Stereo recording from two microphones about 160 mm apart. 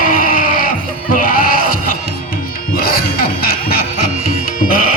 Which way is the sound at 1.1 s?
60° left (ahead or behind).